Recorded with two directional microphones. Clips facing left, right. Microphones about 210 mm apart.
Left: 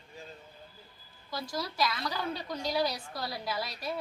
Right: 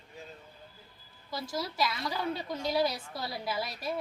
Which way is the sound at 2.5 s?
5° right (ahead or behind).